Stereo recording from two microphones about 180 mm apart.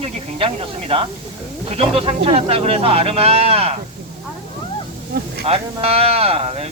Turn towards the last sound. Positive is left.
turn(degrees=-35)  # may be behind; listen again after turning